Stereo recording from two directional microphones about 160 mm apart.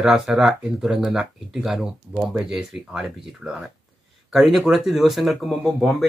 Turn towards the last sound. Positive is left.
turn(degrees=0)  # may be behind; listen again after turning